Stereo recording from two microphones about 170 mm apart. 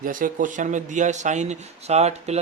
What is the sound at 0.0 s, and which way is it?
Speech, 50° right (ahead or behind).